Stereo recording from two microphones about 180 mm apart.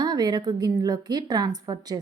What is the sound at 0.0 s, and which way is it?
Speech, 20° right (ahead or behind).